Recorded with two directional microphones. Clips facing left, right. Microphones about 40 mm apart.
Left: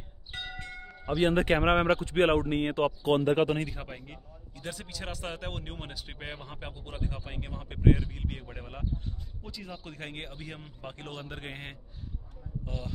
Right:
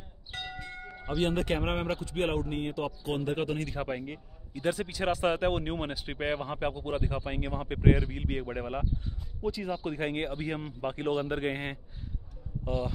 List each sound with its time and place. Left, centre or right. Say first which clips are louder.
0.3 s music: even; left
1.0 s speech: left 3 dB; centre
1.3 s speech: left 5 dB; left
3.8 s speech: right 9 dB; centre
4.6 s speech: right 10 dB; right
9.4 s a man's voice: right 13 dB; centre